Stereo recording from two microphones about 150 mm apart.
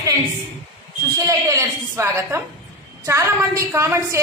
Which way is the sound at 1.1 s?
20° right (ahead or behind).